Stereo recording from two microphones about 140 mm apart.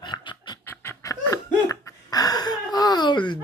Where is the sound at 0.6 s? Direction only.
20° left (ahead or behind).